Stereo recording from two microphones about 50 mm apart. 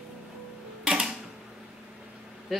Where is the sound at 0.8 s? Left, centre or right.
Centre.